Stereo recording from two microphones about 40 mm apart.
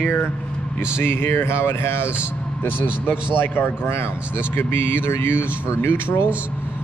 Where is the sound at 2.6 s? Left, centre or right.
Left.